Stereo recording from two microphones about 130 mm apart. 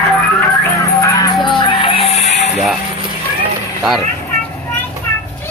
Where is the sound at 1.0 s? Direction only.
25° left (ahead or behind).